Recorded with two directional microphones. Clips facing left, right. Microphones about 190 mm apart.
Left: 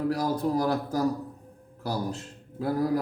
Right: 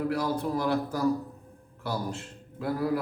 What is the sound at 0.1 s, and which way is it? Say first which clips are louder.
A man's voice: left 2 dB; 40° left (ahead or behind).